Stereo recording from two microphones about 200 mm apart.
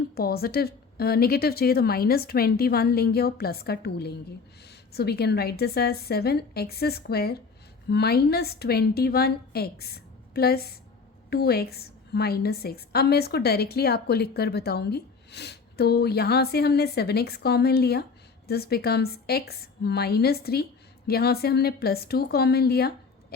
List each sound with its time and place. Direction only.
0.1 s a woman's voice: 50° left (ahead or behind)